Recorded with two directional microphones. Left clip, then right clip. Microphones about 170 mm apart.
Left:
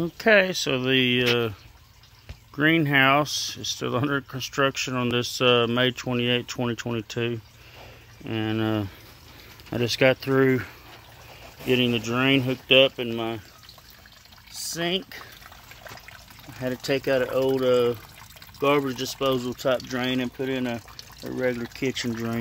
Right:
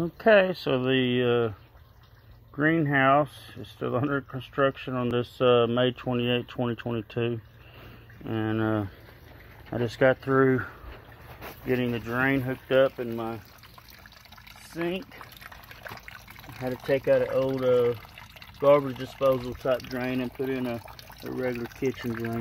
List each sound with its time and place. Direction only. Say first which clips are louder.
0.0 s speech: left 1 dB; 25° left (ahead or behind)
2.5 s speech: left 4 dB; 40° left (ahead or behind)
11.6 s speech: left 5 dB; 60° left (ahead or behind)
14.8 s speech: left 4 dB; 65° left (ahead or behind)
16.8 s speech: right 1 dB; 25° left (ahead or behind)
19.2 s speech: even; 65° left (ahead or behind)
19.9 s speech: left 4 dB; 55° left (ahead or behind)
21.7 s speech: left 2 dB; 35° left (ahead or behind)